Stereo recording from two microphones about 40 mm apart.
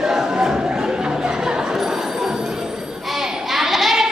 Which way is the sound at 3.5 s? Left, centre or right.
Centre.